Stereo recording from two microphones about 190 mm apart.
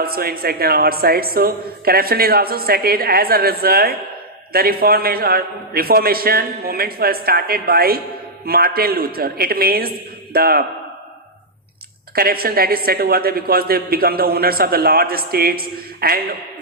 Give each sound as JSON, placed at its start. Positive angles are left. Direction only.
{"t": 0.0, "sound": "a woman's voice", "side_deg": -55}
{"t": 12.1, "sound": "a woman's voice", "side_deg": -50}